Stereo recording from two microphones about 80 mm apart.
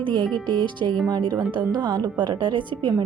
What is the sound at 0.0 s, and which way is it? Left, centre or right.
Music, right.